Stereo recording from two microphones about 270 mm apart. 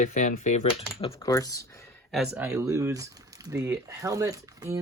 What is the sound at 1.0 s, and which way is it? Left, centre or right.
Speech, centre.